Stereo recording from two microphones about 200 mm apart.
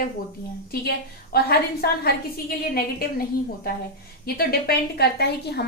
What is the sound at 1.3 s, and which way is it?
Speech, 50° left (ahead or behind).